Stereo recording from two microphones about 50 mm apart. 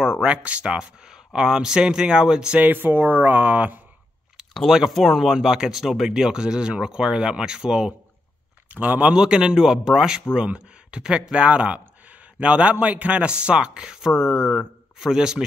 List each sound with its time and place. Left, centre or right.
0.0 s speech: centre
2.6 s speech: right
4.6 s speech: centre
5.3 s speech: centre
8.6 s speech: right
9.1 s speech: centre
10.3 s speech: right
11.8 s a sound: right
12.8 s speech: right